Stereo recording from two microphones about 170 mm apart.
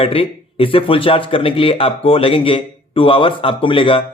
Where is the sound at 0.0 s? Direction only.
35° left (ahead or behind).